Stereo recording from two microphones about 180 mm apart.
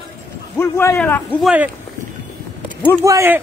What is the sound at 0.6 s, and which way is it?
Speech, 15° left (ahead or behind).